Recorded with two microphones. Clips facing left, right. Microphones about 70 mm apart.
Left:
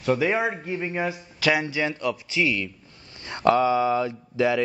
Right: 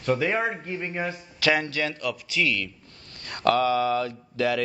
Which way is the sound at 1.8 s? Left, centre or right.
Left.